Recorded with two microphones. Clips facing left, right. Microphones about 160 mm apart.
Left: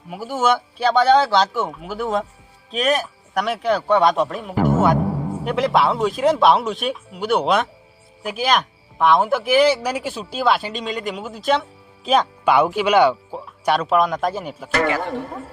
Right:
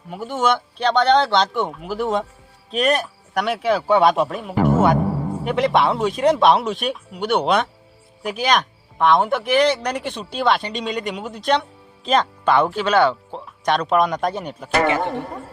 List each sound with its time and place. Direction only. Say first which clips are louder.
0.1 s speech: left 1 dB; 5° left (ahead or behind)
14.8 s a man's voice: right 2 dB; 20° right (ahead or behind)